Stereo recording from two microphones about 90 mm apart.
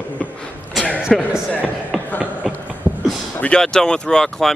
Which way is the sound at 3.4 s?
10° left (ahead or behind).